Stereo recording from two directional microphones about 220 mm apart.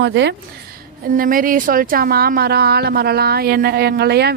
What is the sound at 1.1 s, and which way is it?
Speech, 40° right (ahead or behind).